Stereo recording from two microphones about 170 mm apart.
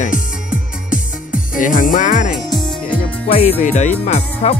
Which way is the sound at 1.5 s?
50° left (ahead or behind).